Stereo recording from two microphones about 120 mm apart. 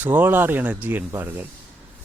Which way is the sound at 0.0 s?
15° right (ahead or behind).